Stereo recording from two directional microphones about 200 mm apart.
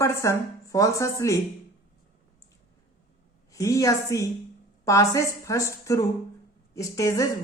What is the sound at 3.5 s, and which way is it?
Speech, 15° left (ahead or behind).